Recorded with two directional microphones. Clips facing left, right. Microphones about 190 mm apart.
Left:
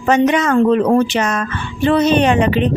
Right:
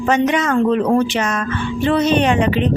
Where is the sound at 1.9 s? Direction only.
40° left (ahead or behind).